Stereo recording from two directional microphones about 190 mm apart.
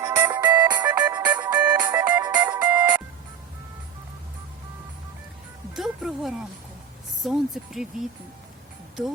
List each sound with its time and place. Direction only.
0.0 s music: 15° right (ahead or behind)
1.3 s music: 10° right (ahead or behind)
5.7 s music: centre (ahead or behind)
7.3 s speech: centre (ahead or behind)